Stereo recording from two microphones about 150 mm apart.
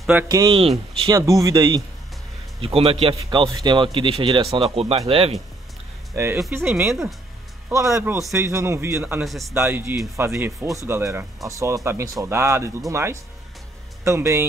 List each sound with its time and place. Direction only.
0.1 s speech: 20° right (ahead or behind)
0.5 s speech: 40° right (ahead or behind)
1.1 s speech: 20° right (ahead or behind)
2.6 s speech: 40° right (ahead or behind)
6.1 s speech: 15° right (ahead or behind)
9.2 s speech: centre (ahead or behind)
9.5 s speech: 15° right (ahead or behind)